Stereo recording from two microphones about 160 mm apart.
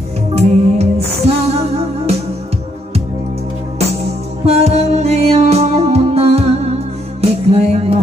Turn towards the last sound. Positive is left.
turn(degrees=-40)  # may be behind; listen again after turning